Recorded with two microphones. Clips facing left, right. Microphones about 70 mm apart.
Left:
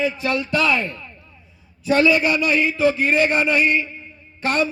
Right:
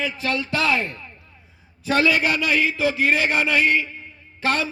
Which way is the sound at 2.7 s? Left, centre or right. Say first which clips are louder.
Left 3 dB; right.